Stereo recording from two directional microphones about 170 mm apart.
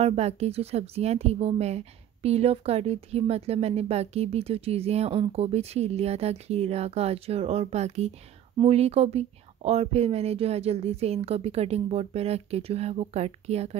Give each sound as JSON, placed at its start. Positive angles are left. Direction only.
{"t": 0.0, "sound": "a woman's voice", "side_deg": -40}